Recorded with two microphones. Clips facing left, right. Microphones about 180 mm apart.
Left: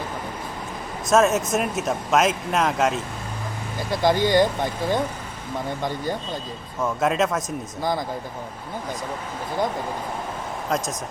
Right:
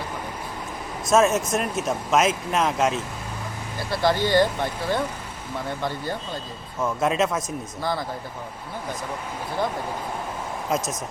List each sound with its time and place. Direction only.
1.1 s speech: centre (ahead or behind)
3.9 s speech: 15° left (ahead or behind)
6.8 s speech: centre (ahead or behind)
7.8 s speech: 15° left (ahead or behind)